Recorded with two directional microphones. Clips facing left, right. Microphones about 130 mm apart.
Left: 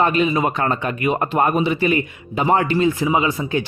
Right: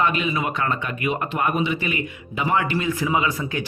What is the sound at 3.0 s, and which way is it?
Speech, 25° left (ahead or behind).